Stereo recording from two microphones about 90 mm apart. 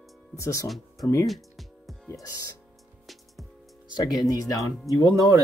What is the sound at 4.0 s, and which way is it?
Speech, 45° left (ahead or behind).